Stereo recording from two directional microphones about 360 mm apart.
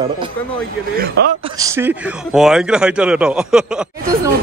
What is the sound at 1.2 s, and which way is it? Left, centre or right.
Speech, right.